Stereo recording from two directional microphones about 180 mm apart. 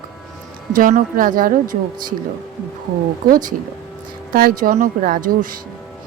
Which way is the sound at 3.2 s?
50° right (ahead or behind).